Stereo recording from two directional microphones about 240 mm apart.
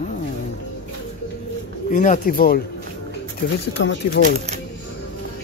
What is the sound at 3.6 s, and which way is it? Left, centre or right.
Speech, left.